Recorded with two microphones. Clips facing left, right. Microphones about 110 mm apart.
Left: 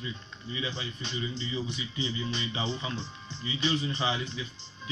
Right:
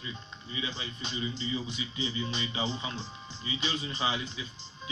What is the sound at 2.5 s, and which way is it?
Speech, 30° left (ahead or behind).